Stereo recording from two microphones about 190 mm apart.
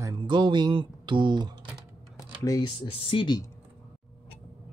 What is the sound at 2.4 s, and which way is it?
Speech, 20° left (ahead or behind).